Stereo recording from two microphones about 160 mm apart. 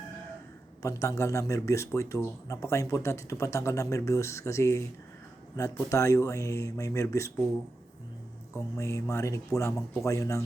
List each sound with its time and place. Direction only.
0.8 s speech: 20° left (ahead or behind)
8.5 s speech: 20° left (ahead or behind)